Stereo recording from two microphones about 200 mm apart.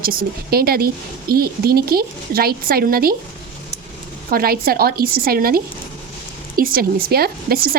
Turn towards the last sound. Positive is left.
turn(degrees=-50)  # may be behind; listen again after turning